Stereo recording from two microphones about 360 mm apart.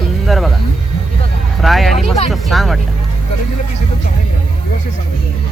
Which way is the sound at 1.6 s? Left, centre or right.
Centre.